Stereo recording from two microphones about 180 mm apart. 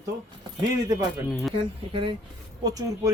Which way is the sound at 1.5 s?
30° right (ahead or behind).